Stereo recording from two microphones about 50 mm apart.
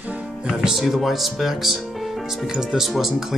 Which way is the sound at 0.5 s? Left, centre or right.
Centre.